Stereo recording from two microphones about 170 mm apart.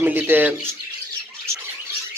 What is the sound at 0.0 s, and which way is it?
Speech, 10° right (ahead or behind).